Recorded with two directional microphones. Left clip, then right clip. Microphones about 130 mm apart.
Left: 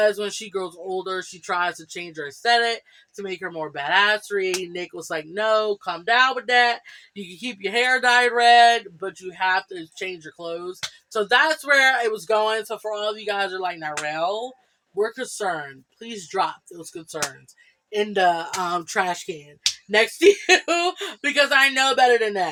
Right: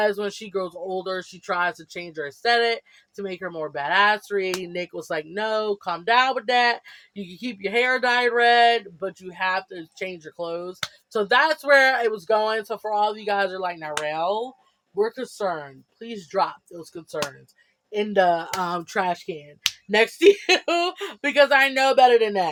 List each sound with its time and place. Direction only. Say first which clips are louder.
0.0 s speech: left 2 dB; 30° right (ahead or behind)
19.0 s speech: right 1 dB; 20° right (ahead or behind)
19.9 s speech: even; 30° right (ahead or behind)